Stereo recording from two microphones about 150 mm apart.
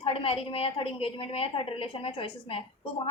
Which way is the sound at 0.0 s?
40° left (ahead or behind).